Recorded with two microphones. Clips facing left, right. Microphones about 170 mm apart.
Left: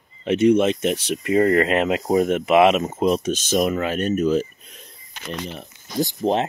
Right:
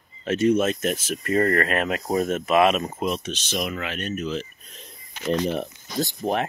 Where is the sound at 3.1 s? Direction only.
40° left (ahead or behind).